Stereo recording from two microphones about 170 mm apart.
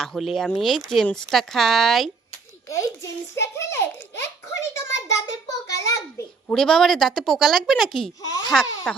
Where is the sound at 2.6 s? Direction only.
20° left (ahead or behind).